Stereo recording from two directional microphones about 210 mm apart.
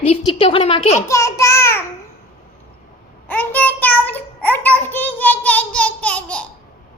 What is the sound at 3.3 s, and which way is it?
Child singing, 10° left (ahead or behind).